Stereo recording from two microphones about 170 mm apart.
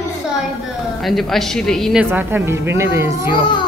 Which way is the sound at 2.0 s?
10° right (ahead or behind).